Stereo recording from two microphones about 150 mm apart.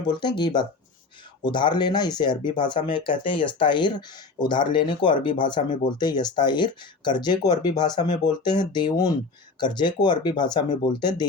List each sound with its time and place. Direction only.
0.2 s speech: 30° left (ahead or behind)